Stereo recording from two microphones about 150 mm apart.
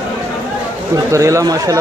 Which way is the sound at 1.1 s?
20° right (ahead or behind).